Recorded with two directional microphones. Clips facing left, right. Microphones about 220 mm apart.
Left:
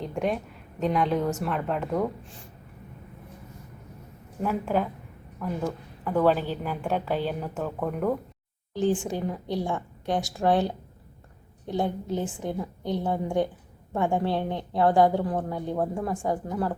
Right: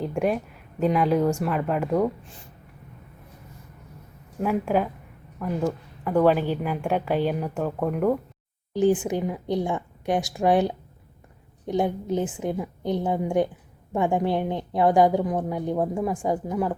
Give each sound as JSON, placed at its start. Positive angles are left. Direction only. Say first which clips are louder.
{"t": 0.0, "sound": "speech", "louder": "right 4 dB", "side_deg": -5}
{"t": 4.4, "sound": "a woman's voice", "louder": "right 3 dB", "side_deg": -10}
{"t": 6.1, "sound": "a woman's voice", "louder": "right 3 dB", "side_deg": -10}
{"t": 8.7, "sound": "a woman's voice", "louder": "right 4 dB", "side_deg": -15}